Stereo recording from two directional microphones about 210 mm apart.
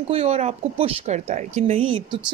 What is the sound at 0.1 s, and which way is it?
Speech, 30° right (ahead or behind).